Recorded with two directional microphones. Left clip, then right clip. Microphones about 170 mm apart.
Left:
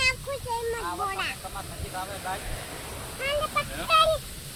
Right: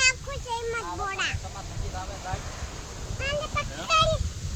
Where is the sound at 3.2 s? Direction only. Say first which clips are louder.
Left 2 dB; 20° right (ahead or behind).